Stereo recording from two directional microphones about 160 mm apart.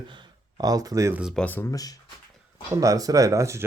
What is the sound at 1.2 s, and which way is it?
Speech, 5° left (ahead or behind).